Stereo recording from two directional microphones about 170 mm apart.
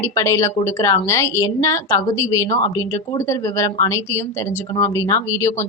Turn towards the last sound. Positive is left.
turn(degrees=15)  # may be behind; listen again after turning